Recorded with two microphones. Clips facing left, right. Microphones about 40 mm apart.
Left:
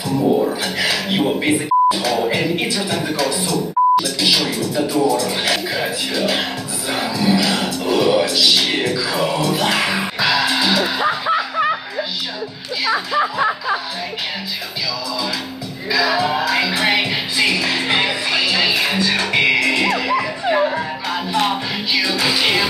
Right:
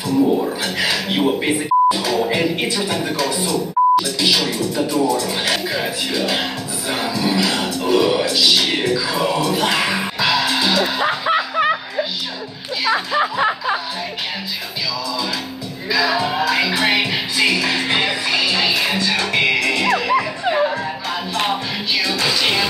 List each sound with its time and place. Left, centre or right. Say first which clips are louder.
0.0 s speech: even; centre
6.9 s music: left 2 dB; centre
11.2 s music: right 1 dB; right
13.2 s music: even; right
15.9 s music: left 1 dB; centre; by 19.9 s left
20.4 s music: left 3 dB; centre
21.9 s music: left 2 dB; left
22.2 s music: left 1 dB; centre